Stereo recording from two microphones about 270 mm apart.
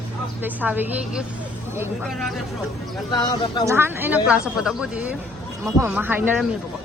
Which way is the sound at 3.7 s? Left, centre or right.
Centre.